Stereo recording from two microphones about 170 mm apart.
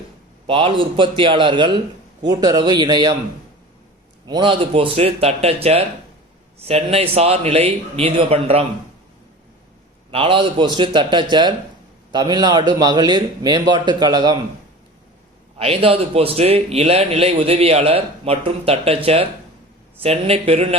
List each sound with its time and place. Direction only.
0.4 s a man's voice: 30° right (ahead or behind)
4.3 s a man's voice: 30° right (ahead or behind)
10.1 s a man's voice: 30° right (ahead or behind)
15.5 s a man's voice: 35° right (ahead or behind)